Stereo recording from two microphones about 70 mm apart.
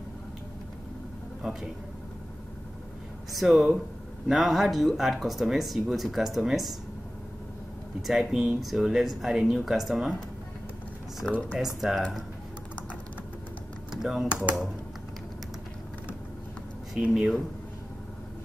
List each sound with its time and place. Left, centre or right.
1.4 s speech: centre
3.3 s speech: centre
8.1 s speech: centre
11.2 s speech: left
11.5 s speech: centre
14.0 s speech: centre
16.9 s speech: centre